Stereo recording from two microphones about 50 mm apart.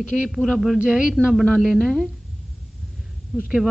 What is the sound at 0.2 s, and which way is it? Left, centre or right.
Speech, centre.